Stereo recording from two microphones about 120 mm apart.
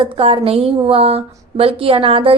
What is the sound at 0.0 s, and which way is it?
A woman's voice, 50° right (ahead or behind).